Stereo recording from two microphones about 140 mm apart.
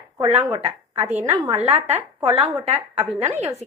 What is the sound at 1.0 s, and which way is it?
Speech, 20° right (ahead or behind).